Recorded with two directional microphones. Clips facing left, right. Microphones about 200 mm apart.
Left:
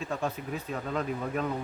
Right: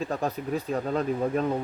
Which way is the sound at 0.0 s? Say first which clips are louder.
Right 4 dB; 35° right (ahead or behind).